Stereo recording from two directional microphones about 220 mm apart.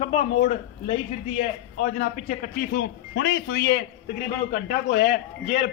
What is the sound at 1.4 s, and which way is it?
A man's voice, 35° left (ahead or behind).